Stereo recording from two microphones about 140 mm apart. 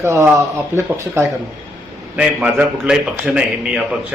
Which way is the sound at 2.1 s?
10° right (ahead or behind).